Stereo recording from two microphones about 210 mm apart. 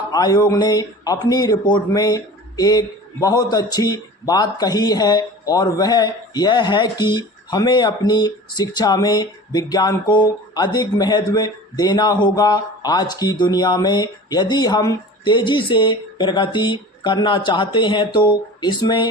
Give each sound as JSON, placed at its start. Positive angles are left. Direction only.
{"t": 0.1, "sound": "speech", "side_deg": 20}